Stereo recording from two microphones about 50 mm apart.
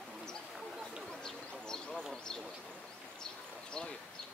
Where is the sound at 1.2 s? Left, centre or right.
Centre.